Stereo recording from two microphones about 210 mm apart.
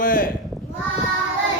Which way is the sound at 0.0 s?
40° left (ahead or behind).